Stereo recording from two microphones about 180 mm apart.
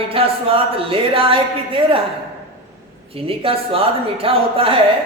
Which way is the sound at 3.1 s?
30° right (ahead or behind).